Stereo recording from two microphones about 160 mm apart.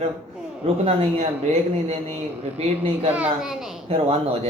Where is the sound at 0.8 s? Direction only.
40° right (ahead or behind).